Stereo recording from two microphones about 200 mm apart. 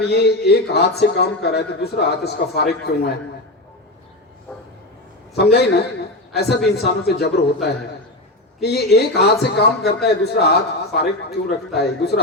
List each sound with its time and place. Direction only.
0.1 s a man's voice: 55° left (ahead or behind)
5.3 s a man's voice: 55° left (ahead or behind)